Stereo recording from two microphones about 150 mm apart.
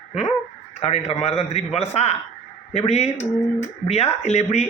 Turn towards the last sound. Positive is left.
turn(degrees=50)  # may be behind; listen again after turning